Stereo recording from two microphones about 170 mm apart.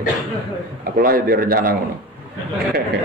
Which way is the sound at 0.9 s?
60° right (ahead or behind).